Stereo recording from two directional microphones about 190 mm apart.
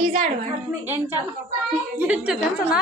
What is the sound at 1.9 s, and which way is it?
Speech, 5° right (ahead or behind).